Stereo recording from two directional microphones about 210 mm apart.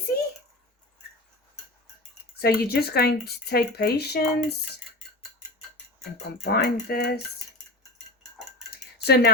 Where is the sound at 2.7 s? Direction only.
50° left (ahead or behind).